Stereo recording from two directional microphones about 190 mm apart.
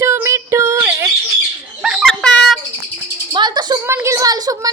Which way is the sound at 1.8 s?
5° right (ahead or behind).